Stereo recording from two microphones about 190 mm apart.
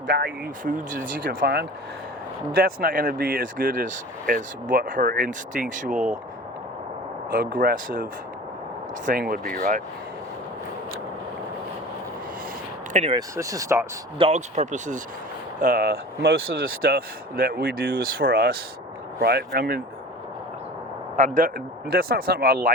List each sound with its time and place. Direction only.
0.1 s speech: 50° right (ahead or behind)
7.3 s speech: 45° right (ahead or behind)
9.0 s speech: 50° right (ahead or behind)
12.9 s speech: 35° right (ahead or behind)
13.1 s speech: 15° right (ahead or behind)
14.2 s speech: 35° right (ahead or behind)
15.6 s speech: 50° right (ahead or behind)
21.3 s speech: 50° right (ahead or behind)